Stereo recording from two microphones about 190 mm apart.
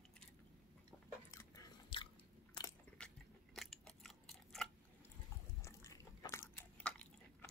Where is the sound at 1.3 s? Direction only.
15° left (ahead or behind).